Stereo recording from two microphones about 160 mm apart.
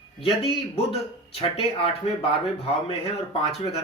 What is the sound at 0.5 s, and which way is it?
Speech, 35° left (ahead or behind).